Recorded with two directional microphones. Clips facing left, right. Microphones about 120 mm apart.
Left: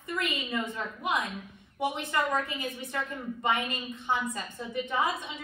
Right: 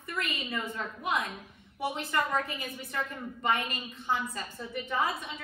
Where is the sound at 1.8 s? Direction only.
20° left (ahead or behind).